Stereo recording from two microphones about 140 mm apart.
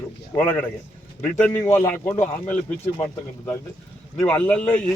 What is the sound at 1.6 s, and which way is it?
Speech, 15° left (ahead or behind).